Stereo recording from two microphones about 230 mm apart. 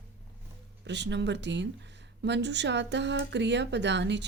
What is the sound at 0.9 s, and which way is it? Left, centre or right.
Speech, right.